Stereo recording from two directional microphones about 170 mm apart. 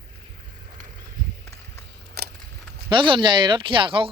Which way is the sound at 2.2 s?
65° right (ahead or behind).